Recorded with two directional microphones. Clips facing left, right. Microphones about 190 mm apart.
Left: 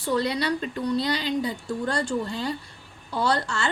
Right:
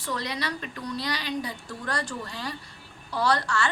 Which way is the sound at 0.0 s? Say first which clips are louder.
Left 7 dB; 30° left (ahead or behind).